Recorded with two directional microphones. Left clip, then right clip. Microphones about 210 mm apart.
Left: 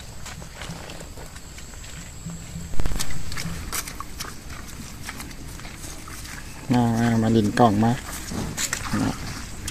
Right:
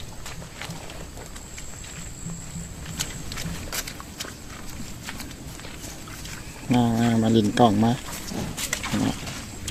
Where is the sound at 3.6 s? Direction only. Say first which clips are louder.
Left 1 dB; 5° right (ahead or behind).